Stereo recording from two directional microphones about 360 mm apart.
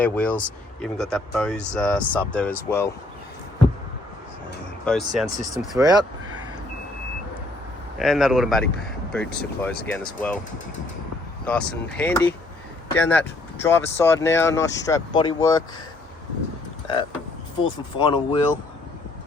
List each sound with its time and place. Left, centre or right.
0.0 s speech: centre
4.9 s speech: centre
7.9 s speech: centre
11.4 s speech: centre
17.9 s speech: centre